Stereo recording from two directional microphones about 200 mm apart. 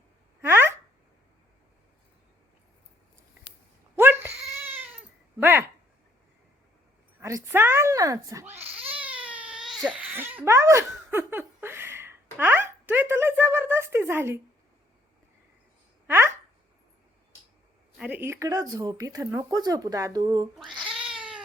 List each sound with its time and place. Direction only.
0.4 s a sound: 10° right (ahead or behind)
3.9 s cat: 10° right (ahead or behind)
5.4 s speech: 10° right (ahead or behind)
7.2 s speech: 15° right (ahead or behind)
8.9 s baby cry: 5° right (ahead or behind)
9.2 s speech: 5° right (ahead or behind)
16.0 s speech: 10° right (ahead or behind)
17.9 s speech: 5° right (ahead or behind)
20.6 s cat: centre (ahead or behind)